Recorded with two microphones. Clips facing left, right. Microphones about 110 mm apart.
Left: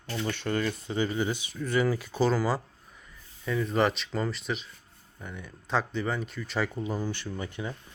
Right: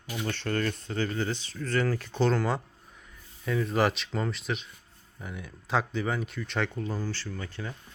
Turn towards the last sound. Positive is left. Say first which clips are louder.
# left 3 dB
turn(degrees=15)  # may be behind; listen again after turning